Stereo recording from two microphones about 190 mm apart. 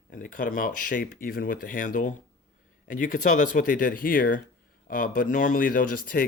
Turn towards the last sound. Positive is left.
turn(degrees=50)  # may be behind; listen again after turning